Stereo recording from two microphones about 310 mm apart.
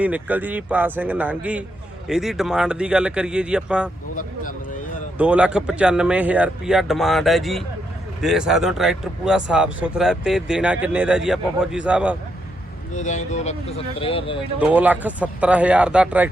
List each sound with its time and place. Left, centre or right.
0.0 s speech: centre
5.1 s speech: centre
12.9 s speech: left
14.6 s speech: centre